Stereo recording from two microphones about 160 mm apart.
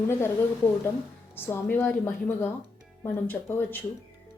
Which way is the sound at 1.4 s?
15° left (ahead or behind).